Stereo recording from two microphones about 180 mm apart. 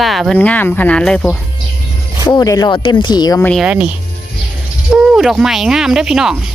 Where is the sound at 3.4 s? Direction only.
Centre (ahead or behind).